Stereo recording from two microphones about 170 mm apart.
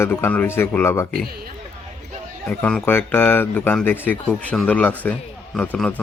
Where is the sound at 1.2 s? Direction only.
65° right (ahead or behind).